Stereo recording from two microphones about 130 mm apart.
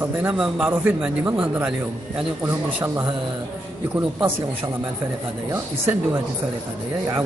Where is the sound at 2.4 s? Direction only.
20° right (ahead or behind).